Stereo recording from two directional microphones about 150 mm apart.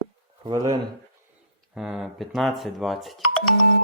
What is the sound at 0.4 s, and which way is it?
Speech, 25° right (ahead or behind).